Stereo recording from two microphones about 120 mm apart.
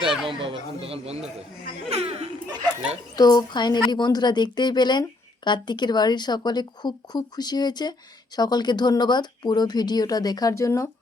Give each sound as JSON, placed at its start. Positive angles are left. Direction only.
{"t": 0.0, "sound": "speech", "side_deg": 0}
{"t": 0.3, "sound": "speech", "side_deg": -50}
{"t": 1.9, "sound": "a sound", "side_deg": -55}
{"t": 3.2, "sound": "speech", "side_deg": 35}